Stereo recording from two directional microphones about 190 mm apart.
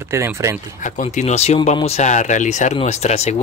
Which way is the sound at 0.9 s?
35° left (ahead or behind).